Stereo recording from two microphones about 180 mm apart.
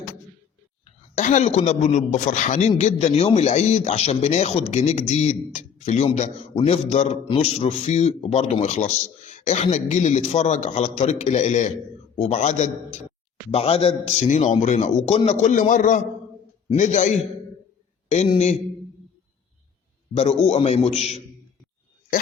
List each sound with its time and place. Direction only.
1.1 s a man's voice: 40° left (ahead or behind)
20.1 s a man's voice: 35° left (ahead or behind)